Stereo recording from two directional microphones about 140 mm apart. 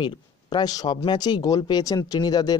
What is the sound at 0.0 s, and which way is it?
Speech, 35° left (ahead or behind).